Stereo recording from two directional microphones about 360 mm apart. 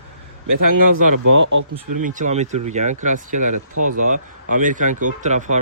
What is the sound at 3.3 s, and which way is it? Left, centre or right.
Speech, right.